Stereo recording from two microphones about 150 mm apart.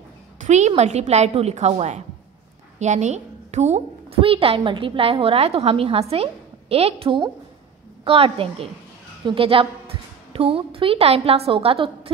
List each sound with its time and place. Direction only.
0.4 s a woman's voice: 50° right (ahead or behind)